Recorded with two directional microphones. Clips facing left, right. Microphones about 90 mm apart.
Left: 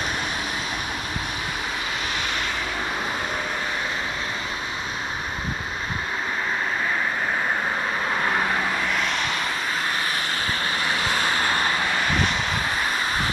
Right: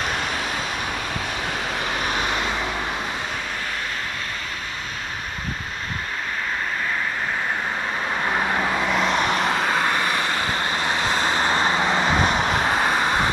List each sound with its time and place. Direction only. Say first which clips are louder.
8.3 s vehicle: right 2 dB; 5° right (ahead or behind)
8.5 s vehicle: right 3 dB; 20° right (ahead or behind)
9.4 s vehicle: right 6 dB; 65° right (ahead or behind)
10.5 s vehicle: right 2 dB; 30° right (ahead or behind)